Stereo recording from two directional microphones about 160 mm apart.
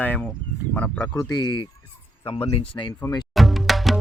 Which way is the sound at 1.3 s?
25° left (ahead or behind).